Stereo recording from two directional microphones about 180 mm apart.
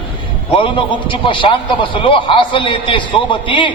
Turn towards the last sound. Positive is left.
turn(degrees=25)  # may be behind; listen again after turning